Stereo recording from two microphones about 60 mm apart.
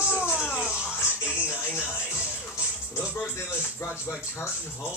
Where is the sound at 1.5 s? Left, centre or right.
Left.